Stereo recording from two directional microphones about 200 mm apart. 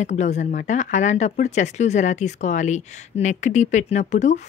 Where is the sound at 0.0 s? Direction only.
35° left (ahead or behind).